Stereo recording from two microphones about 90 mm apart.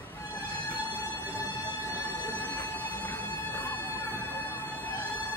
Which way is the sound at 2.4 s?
20° left (ahead or behind).